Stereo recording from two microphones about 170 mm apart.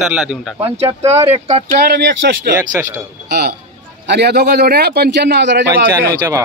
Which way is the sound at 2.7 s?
10° right (ahead or behind).